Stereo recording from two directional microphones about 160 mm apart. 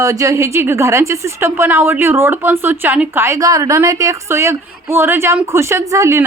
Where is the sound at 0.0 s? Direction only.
20° right (ahead or behind).